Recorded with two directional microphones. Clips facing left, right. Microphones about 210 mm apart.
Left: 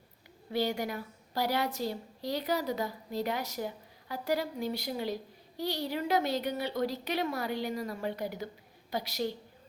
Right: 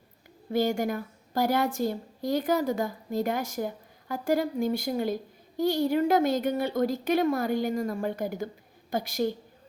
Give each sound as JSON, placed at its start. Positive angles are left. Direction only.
{"t": 0.5, "sound": "a woman's voice", "side_deg": -45}